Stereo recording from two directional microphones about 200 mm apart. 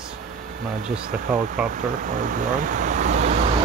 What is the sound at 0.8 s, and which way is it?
Speech, 40° right (ahead or behind).